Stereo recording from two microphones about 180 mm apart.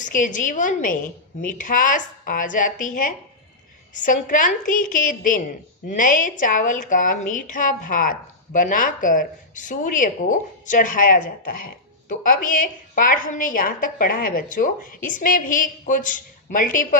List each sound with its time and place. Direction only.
0.0 s a woman's voice: 45° left (ahead or behind)